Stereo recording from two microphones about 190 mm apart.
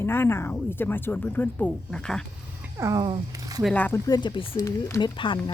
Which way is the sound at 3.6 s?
10° left (ahead or behind).